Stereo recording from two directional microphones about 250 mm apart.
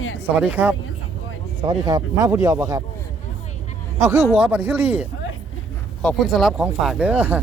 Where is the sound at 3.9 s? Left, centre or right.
Centre.